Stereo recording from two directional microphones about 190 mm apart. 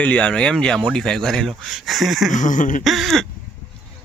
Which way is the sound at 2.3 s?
40° left (ahead or behind).